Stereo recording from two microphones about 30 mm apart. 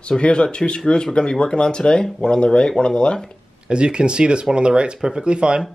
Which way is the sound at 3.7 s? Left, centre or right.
Right.